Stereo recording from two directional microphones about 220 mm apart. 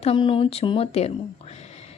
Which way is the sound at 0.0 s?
25° left (ahead or behind).